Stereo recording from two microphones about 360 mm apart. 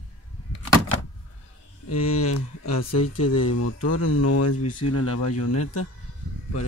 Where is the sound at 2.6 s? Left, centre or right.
Left.